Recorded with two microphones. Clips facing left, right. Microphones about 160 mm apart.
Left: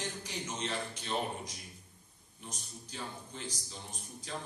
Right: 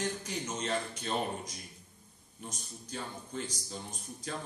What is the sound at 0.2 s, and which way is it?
A man's voice, 45° right (ahead or behind).